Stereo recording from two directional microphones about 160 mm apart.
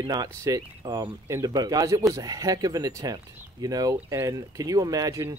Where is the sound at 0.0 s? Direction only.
25° right (ahead or behind).